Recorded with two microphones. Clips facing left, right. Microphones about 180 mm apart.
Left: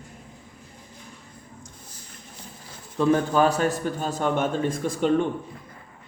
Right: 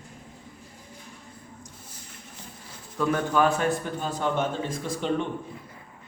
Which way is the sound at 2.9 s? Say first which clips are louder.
Left 4 dB; 30° left (ahead or behind).